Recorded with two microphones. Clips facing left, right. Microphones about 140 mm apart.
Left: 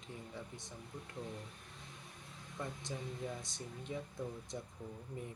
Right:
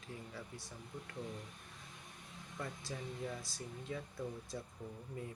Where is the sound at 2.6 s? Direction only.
20° left (ahead or behind).